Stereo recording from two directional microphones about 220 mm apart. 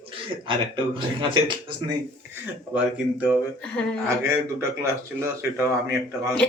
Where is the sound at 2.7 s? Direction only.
5° right (ahead or behind).